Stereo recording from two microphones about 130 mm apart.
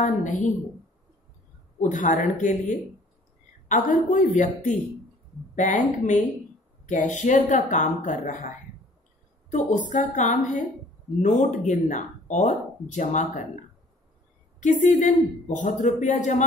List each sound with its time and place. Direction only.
0.0 s speech: 75° left (ahead or behind)
1.8 s speech: 80° left
9.5 s speech: 70° left (ahead or behind)
14.6 s speech: 70° left (ahead or behind)